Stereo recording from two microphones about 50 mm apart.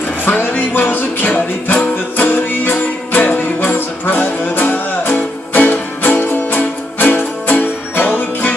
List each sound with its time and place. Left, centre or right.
0.2 s music: left